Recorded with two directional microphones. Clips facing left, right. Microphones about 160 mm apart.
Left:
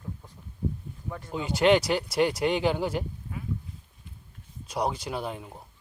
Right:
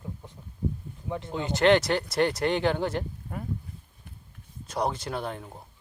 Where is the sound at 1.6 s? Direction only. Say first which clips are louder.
Even; 10° left (ahead or behind).